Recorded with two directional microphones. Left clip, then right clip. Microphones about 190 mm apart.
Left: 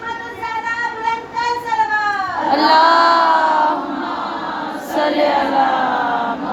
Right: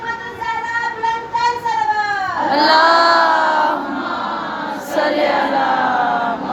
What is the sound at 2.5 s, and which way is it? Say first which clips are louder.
Child singing: even; 5° left (ahead or behind).